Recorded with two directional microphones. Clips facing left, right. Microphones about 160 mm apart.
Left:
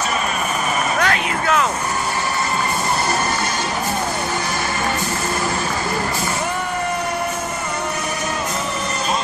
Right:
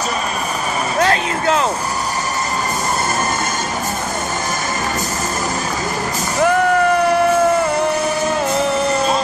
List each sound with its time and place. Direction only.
0.9 s vehicle: 30° right (ahead or behind)